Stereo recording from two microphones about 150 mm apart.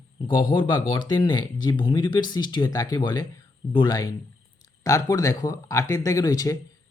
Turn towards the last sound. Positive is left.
turn(degrees=25)  # may be behind; listen again after turning